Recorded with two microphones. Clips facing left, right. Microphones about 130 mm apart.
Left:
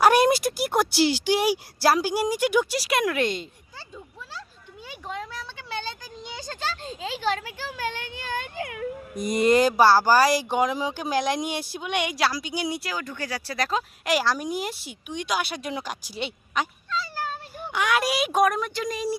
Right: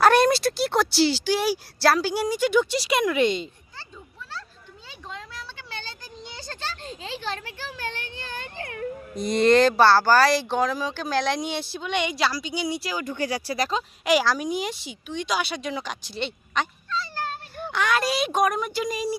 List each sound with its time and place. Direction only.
0.0 s speech: 15° left (ahead or behind)
4.9 s a sound: 15° left (ahead or behind)
7.6 s speech: 10° left (ahead or behind)
12.8 s speech: 5° right (ahead or behind)
13.1 s speech: 15° right (ahead or behind)
13.7 s speech: centre (ahead or behind)